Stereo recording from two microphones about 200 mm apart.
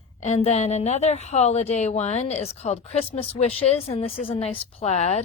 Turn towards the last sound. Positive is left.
turn(degrees=35)  # may be behind; listen again after turning